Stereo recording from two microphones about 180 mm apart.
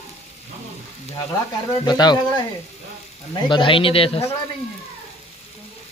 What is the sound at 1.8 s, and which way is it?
A man's voice, 25° left (ahead or behind).